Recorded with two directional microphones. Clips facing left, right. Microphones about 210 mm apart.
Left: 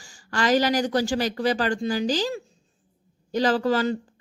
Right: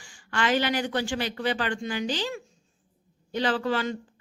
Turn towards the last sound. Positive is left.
turn(degrees=40)  # may be behind; listen again after turning